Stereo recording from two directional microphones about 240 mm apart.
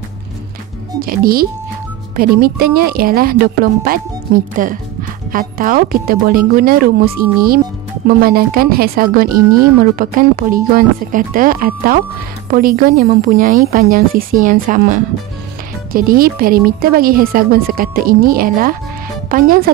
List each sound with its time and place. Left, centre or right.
1.0 s speech: right
4.6 s speech: right